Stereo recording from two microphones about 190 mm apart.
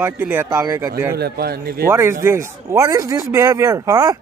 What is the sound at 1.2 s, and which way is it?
Speech, 55° right (ahead or behind).